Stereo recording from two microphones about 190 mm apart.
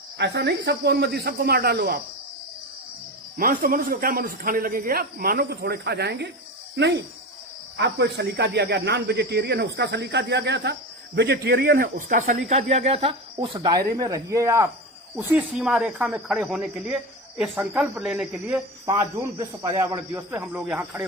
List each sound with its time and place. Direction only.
0.2 s speech: 60° right (ahead or behind)
3.3 s a man's voice: 50° right (ahead or behind); by 18.6 s 5° right (ahead or behind)
18.9 s speech: 20° right (ahead or behind)